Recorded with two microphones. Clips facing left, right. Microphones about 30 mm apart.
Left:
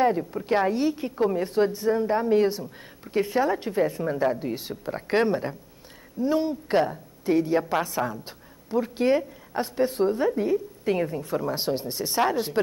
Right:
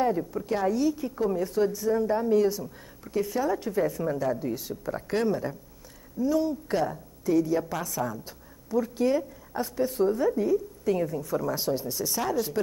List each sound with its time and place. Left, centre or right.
0.0 s a woman's voice: left